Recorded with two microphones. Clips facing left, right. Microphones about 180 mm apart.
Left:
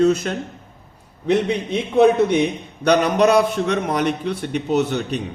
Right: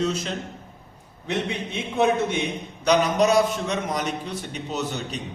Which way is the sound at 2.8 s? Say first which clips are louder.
Left 4 dB; 60° left (ahead or behind).